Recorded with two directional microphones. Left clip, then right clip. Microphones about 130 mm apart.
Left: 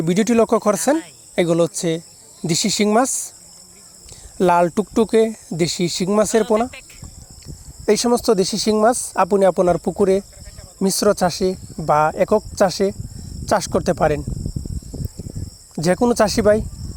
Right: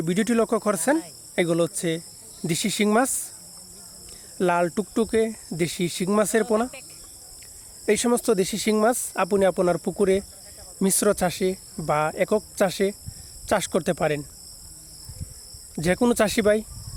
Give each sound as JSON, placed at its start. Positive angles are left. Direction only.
{"t": 0.0, "sound": "speech", "side_deg": 25}
{"t": 4.4, "sound": "speech", "side_deg": 35}
{"t": 6.4, "sound": "cricket", "side_deg": 0}
{"t": 7.9, "sound": "speech", "side_deg": 25}
{"t": 15.7, "sound": "cricket", "side_deg": 25}
{"t": 16.1, "sound": "speech", "side_deg": 15}